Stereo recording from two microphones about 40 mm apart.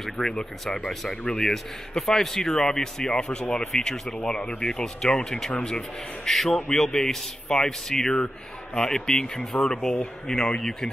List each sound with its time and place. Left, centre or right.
0.0 s a man's voice: centre
6.3 s a man's voice: centre